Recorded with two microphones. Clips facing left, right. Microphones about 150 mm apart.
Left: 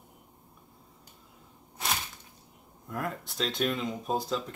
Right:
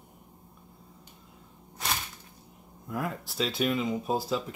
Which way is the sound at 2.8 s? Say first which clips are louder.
Right 1 dB; centre (ahead or behind).